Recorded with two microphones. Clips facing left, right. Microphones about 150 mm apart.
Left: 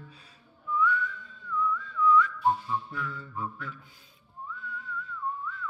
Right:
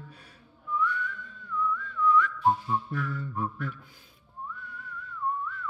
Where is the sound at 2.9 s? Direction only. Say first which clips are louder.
Right 4 dB; 55° right (ahead or behind).